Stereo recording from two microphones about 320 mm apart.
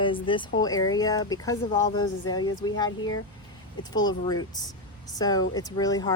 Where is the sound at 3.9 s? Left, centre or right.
Centre.